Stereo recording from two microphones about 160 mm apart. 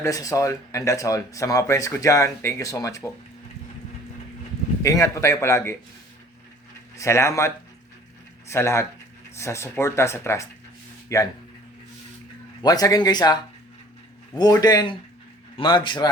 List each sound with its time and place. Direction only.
0.0 s speech: 20° left (ahead or behind)
4.8 s speech: 20° left (ahead or behind)
6.9 s speech: 20° left (ahead or behind)
12.6 s a man's voice: 25° left (ahead or behind)